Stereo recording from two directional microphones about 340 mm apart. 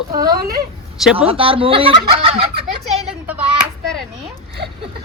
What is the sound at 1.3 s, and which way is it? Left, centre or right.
Speech, centre.